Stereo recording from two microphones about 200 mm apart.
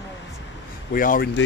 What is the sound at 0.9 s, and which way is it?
Speech, 45° left (ahead or behind).